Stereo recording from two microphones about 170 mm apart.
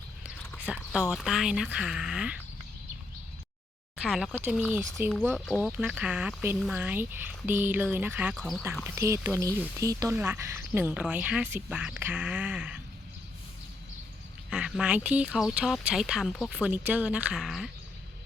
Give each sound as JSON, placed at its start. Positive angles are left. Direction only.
{"t": 0.7, "sound": "speech", "side_deg": -5}
{"t": 4.0, "sound": "speech", "side_deg": 0}
{"t": 8.4, "sound": "speech", "side_deg": 0}
{"t": 8.8, "sound": "speech", "side_deg": -15}
{"t": 14.5, "sound": "speech", "side_deg": -5}